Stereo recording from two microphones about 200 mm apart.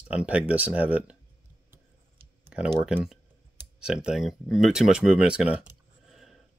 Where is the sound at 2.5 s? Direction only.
5° right (ahead or behind).